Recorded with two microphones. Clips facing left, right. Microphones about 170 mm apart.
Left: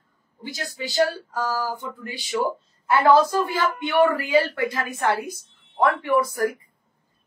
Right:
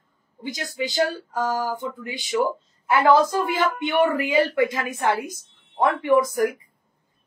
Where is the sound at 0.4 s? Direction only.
20° right (ahead or behind).